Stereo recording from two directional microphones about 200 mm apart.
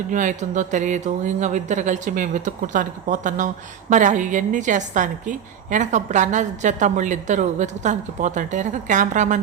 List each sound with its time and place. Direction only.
0.1 s speech: 40° right (ahead or behind)